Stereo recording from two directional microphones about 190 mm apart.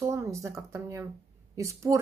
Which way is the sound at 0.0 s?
15° right (ahead or behind).